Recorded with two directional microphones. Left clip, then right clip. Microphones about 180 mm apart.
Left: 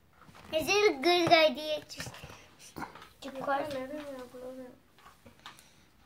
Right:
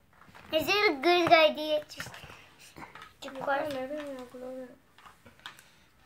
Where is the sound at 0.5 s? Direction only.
10° right (ahead or behind).